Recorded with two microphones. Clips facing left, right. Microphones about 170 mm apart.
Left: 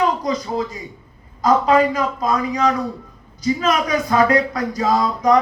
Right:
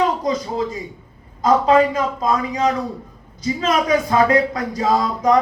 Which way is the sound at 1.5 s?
25° right (ahead or behind).